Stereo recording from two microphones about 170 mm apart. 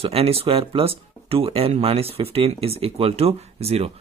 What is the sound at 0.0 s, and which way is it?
Speech, 35° right (ahead or behind).